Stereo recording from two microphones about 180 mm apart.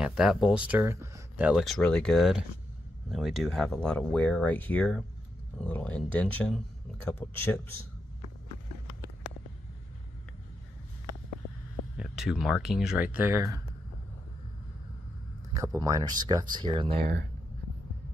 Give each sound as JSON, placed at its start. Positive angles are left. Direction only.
{"t": 0.0, "sound": "speech", "side_deg": -5}
{"t": 1.5, "sound": "speech", "side_deg": 0}
{"t": 12.0, "sound": "speech", "side_deg": -5}
{"t": 15.5, "sound": "speech", "side_deg": -15}